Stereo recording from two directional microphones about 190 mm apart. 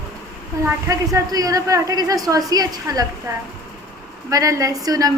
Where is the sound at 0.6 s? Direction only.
15° right (ahead or behind).